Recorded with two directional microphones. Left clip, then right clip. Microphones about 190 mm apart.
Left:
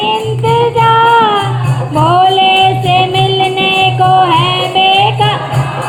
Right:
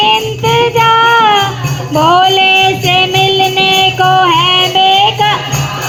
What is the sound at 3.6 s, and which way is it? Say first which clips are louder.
Music: left 1 dB; 40° right (ahead or behind).